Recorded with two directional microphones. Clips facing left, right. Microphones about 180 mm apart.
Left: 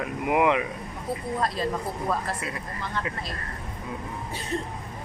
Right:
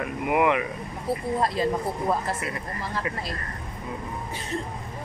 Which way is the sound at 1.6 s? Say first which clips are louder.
Right 3 dB; 25° right (ahead or behind).